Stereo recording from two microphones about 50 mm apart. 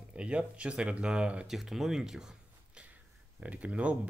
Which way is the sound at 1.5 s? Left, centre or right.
Centre.